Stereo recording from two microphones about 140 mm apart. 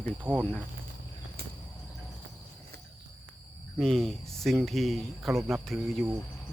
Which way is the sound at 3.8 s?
5° left (ahead or behind).